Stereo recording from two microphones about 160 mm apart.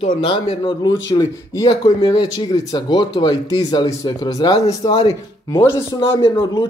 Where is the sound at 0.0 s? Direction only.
30° left (ahead or behind).